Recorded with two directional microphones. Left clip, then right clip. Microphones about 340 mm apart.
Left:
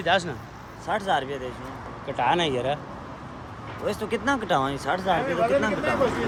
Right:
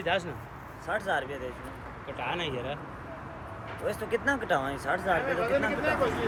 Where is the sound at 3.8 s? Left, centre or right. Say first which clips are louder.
Left 3 dB; left.